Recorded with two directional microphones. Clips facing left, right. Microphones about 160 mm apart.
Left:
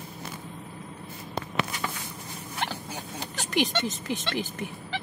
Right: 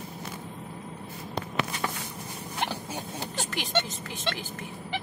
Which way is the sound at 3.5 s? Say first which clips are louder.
Left 5 dB; 20° left (ahead or behind).